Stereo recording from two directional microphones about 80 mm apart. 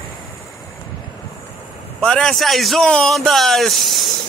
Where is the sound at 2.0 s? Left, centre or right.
Centre.